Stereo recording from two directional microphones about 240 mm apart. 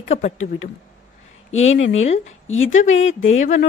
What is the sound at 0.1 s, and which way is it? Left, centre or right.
Speech, left.